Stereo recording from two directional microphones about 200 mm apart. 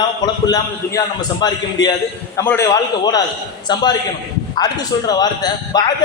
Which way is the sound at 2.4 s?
10° left (ahead or behind).